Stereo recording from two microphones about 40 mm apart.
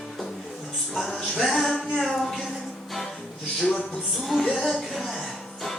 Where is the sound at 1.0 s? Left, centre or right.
Centre.